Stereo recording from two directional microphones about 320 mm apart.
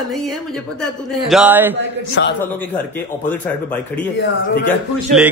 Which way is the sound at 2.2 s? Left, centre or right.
Left.